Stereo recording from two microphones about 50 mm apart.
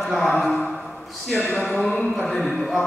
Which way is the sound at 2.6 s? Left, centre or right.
Centre.